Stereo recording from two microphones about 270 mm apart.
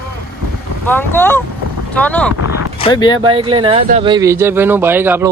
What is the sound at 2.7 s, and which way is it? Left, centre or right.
Speech, centre.